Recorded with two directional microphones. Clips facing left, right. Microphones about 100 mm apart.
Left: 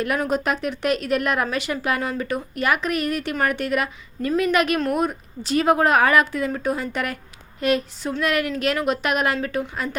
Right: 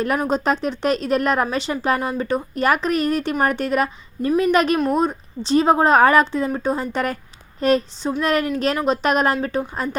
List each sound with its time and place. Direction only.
0.3 s speech: 30° right (ahead or behind)